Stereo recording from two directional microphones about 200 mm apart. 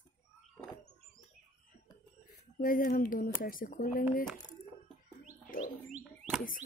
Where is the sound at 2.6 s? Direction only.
45° left (ahead or behind).